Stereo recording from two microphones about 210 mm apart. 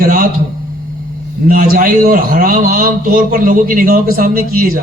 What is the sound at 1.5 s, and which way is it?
A man's voice, 45° right (ahead or behind).